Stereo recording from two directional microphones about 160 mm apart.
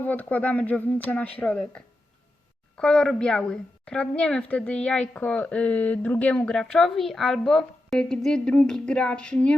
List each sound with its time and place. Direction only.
0.0 s a woman's voice: 10° left (ahead or behind)